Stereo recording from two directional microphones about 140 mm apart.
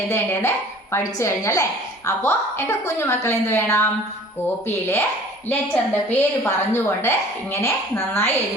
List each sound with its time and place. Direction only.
0.1 s a woman's voice: 20° left (ahead or behind)
5.5 s a woman's voice: 15° left (ahead or behind)